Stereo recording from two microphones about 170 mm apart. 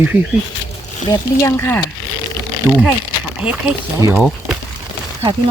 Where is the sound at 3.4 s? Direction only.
5° right (ahead or behind).